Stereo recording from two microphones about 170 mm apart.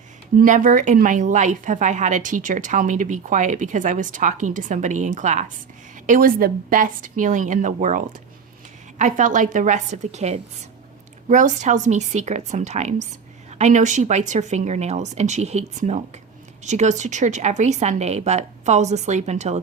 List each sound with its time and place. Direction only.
0.3 s a woman's voice: 50° right (ahead or behind)
6.1 s a woman's voice: 55° right (ahead or behind); by 19.5 s 40° right (ahead or behind)